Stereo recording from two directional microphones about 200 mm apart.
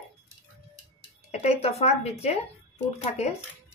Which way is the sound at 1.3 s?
30° left (ahead or behind).